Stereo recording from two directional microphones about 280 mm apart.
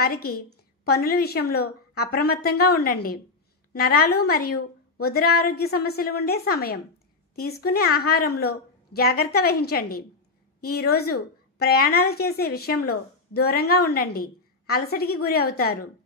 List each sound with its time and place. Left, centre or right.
0.0 s a woman's voice: left